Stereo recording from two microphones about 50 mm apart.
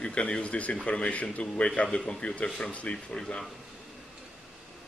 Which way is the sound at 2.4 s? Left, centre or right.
Centre.